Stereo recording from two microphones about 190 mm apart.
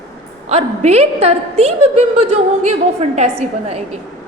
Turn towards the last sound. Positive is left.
turn(degrees=-35)  # may be behind; listen again after turning